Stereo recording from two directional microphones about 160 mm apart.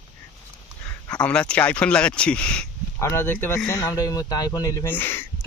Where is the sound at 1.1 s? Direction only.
5° left (ahead or behind).